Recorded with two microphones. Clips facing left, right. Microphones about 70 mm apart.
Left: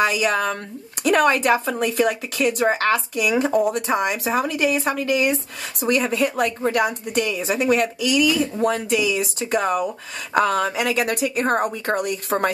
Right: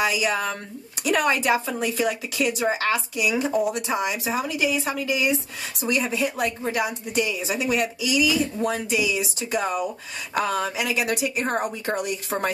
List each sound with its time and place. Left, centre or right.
0.0 s speech: left